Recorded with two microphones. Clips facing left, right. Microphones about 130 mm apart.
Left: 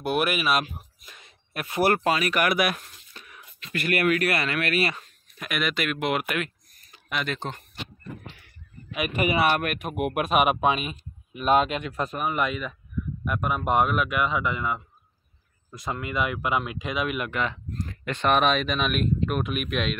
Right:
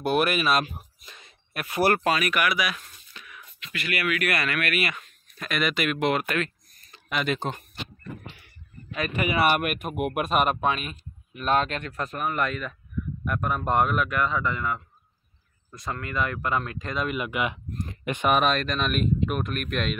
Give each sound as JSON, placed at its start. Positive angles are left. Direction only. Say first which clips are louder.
{"t": 0.0, "sound": "speech", "louder": "right 2 dB", "side_deg": 5}
{"t": 1.2, "sound": "speech", "louder": "left 1 dB", "side_deg": 20}
{"t": 2.3, "sound": "speech", "louder": "left 2 dB", "side_deg": 50}
{"t": 3.1, "sound": "a sound", "louder": "right 1 dB", "side_deg": 35}
{"t": 4.3, "sound": "speech", "louder": "left 1 dB", "side_deg": 25}
{"t": 5.4, "sound": "speech", "louder": "right 1 dB", "side_deg": 5}
{"t": 7.3, "sound": "speech", "louder": "right 3 dB", "side_deg": -10}
{"t": 9.4, "sound": "speech", "louder": "even", "side_deg": -5}
{"t": 15.8, "sound": "speech", "louder": "left 1 dB", "side_deg": 15}
{"t": 17.3, "sound": "speech", "louder": "even", "side_deg": -10}
{"t": 18.3, "sound": "speech", "louder": "left 1 dB", "side_deg": 0}
{"t": 19.4, "sound": "speech", "louder": "left 1 dB", "side_deg": 5}